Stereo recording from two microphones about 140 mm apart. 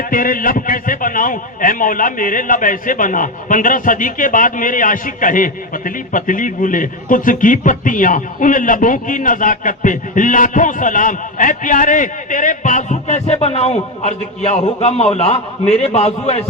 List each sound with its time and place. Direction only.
0.0 s a man's voice: 80° left; by 16.4 s 50° left (ahead or behind)